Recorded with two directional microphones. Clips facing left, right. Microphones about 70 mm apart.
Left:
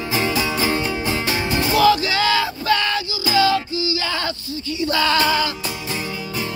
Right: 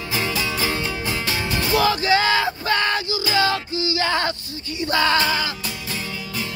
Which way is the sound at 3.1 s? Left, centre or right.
Right.